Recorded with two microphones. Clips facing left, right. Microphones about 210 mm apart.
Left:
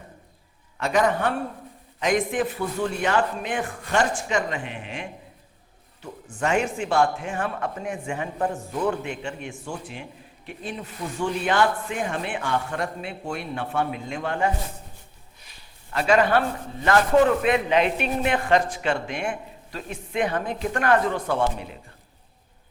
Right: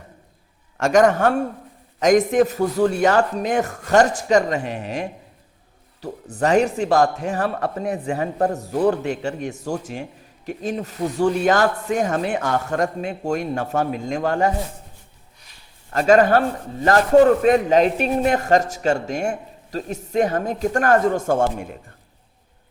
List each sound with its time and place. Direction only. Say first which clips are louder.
0.8 s a man's voice: right 7 dB; 45° right (ahead or behind)
15.9 s a man's voice: right 5 dB; 45° right (ahead or behind)